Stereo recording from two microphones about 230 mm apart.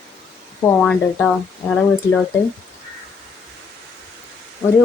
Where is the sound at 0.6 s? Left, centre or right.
Centre.